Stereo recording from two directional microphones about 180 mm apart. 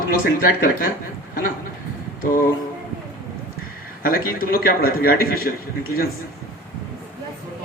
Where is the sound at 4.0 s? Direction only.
55° left (ahead or behind).